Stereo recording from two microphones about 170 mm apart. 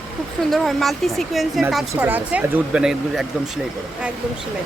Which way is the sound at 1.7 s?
10° right (ahead or behind).